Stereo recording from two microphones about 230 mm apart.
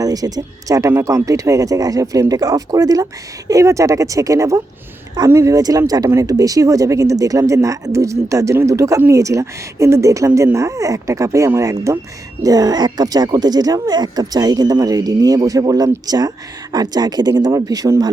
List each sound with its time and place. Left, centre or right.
0.0 s speech: centre